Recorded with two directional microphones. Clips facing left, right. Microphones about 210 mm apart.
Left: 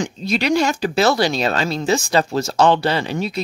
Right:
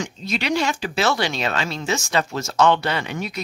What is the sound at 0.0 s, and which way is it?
Speech, 35° left (ahead or behind).